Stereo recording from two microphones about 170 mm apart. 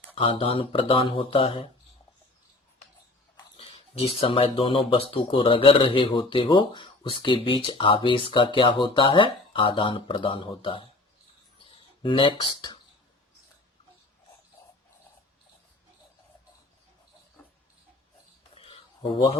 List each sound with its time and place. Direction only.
0.2 s speech: 30° left (ahead or behind)
3.6 s speech: 35° left (ahead or behind)
12.0 s speech: 30° left (ahead or behind)
18.5 s a sound: 35° left (ahead or behind)